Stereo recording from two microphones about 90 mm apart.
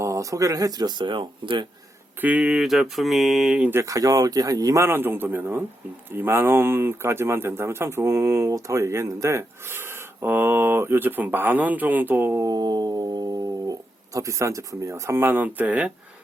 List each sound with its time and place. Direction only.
0.0 s speech: 35° right (ahead or behind); by 1.6 s 65° right (ahead or behind)
2.2 s mantra: 15° right (ahead or behind)
3.6 s speech: 25° right (ahead or behind)
3.8 s speech: 40° right (ahead or behind)
4.8 s speech: 25° right (ahead or behind)
12.4 s speech: 50° right (ahead or behind); by 15.9 s 15° right (ahead or behind)